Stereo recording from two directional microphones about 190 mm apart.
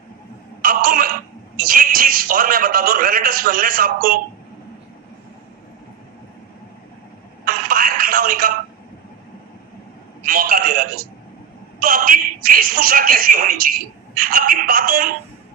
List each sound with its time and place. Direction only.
0.6 s throat clearing: 50° right (ahead or behind)
1.5 s a man's voice: 50° right (ahead or behind)
7.4 s telephone: 50° right (ahead or behind)
10.2 s telephone: 50° right (ahead or behind)
11.8 s a sound: 45° right (ahead or behind)
14.2 s a man's voice: 50° right (ahead or behind)